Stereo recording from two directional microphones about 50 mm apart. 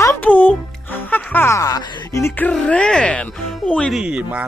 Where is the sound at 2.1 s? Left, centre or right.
Left.